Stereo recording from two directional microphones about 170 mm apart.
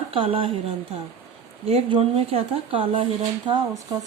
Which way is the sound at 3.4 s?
20° right (ahead or behind).